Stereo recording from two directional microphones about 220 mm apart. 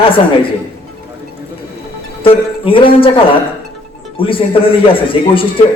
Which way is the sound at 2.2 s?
25° left (ahead or behind).